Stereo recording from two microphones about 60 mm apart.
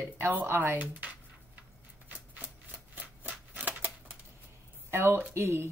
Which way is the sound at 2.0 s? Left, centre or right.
Right.